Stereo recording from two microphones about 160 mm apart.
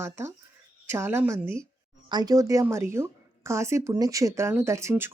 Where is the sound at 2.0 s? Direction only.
25° right (ahead or behind).